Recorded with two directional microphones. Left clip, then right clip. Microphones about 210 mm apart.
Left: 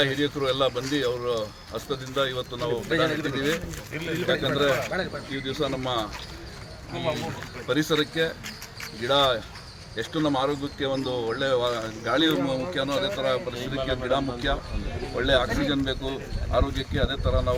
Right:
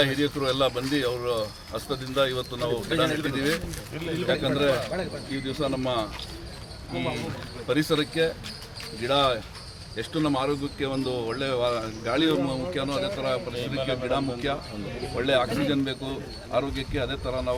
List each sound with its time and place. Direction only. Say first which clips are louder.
0.0 s speech: even; centre (ahead or behind)
7.7 s speech: left 1 dB; 10° right (ahead or behind)
13.7 s speech: even; 25° right (ahead or behind)
14.0 s speech: left 1 dB; 5° right (ahead or behind)